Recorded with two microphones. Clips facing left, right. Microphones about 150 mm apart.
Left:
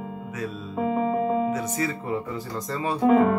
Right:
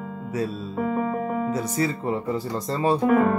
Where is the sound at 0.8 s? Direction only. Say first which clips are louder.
Left 2 dB; 20° left (ahead or behind).